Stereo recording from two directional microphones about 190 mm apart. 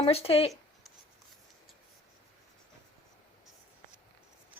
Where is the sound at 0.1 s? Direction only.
30° left (ahead or behind).